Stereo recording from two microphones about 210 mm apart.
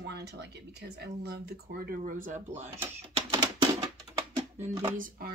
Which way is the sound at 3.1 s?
20° right (ahead or behind).